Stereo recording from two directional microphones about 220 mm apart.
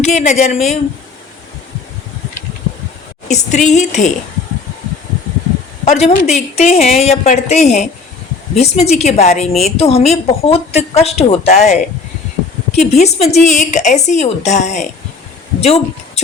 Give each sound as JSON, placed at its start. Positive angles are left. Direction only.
{"t": 0.0, "sound": "a woman's voice", "side_deg": 30}
{"t": 3.2, "sound": "a woman's voice", "side_deg": 30}
{"t": 5.8, "sound": "a woman's voice", "side_deg": 30}